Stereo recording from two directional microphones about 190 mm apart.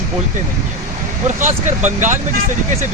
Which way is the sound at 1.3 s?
40° right (ahead or behind).